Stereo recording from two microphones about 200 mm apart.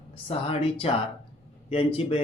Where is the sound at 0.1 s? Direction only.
25° left (ahead or behind).